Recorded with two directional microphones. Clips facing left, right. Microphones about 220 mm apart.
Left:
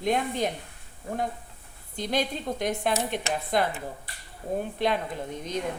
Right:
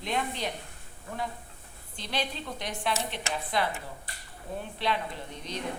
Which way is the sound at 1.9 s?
45° left (ahead or behind).